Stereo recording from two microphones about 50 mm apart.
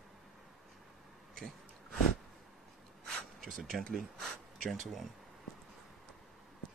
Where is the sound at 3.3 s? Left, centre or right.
Centre.